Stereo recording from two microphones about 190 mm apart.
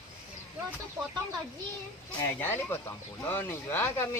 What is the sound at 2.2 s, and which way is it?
Speech, 10° left (ahead or behind).